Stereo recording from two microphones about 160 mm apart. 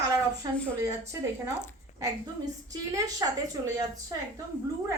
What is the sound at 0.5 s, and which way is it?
Speech, 10° left (ahead or behind).